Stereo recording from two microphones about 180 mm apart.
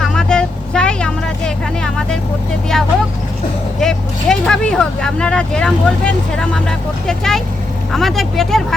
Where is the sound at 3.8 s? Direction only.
5° left (ahead or behind).